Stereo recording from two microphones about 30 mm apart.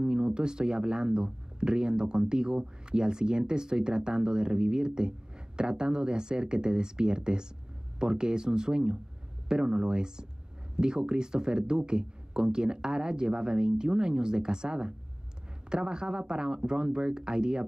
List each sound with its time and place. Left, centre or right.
0.0 s speech: right